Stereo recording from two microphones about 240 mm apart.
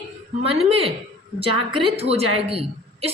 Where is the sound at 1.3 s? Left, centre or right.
Right.